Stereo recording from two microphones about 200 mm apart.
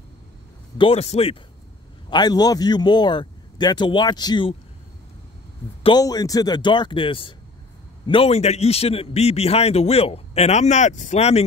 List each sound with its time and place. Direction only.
0.7 s a man's voice: 30° left (ahead or behind)
5.8 s a man's voice: 25° left (ahead or behind)